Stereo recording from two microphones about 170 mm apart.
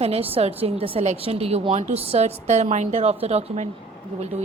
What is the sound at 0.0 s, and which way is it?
A woman's voice, 35° right (ahead or behind).